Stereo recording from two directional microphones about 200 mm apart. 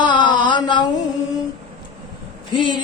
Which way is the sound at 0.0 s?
25° left (ahead or behind).